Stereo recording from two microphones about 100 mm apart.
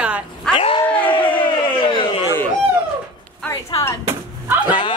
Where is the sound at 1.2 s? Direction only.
60° left (ahead or behind).